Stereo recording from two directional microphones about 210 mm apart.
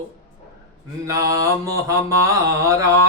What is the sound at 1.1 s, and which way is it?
Mantra, 15° right (ahead or behind).